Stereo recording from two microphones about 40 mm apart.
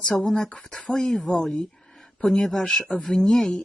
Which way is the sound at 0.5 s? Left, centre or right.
Left.